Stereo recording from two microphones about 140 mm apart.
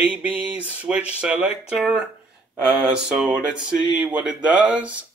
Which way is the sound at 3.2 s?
5° right (ahead or behind).